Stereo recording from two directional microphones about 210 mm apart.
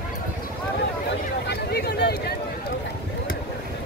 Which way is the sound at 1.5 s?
50° left (ahead or behind).